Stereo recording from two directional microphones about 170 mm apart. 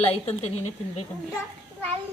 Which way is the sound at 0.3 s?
35° left (ahead or behind).